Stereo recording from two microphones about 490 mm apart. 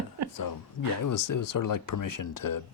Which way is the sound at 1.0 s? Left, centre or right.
Left.